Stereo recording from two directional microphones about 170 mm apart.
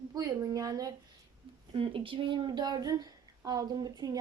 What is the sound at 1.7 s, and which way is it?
Speech, 30° right (ahead or behind).